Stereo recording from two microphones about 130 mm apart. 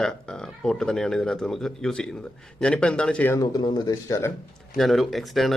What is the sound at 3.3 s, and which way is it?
Speech, 30° left (ahead or behind).